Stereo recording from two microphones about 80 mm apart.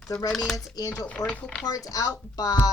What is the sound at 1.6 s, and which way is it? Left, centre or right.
Speech, left.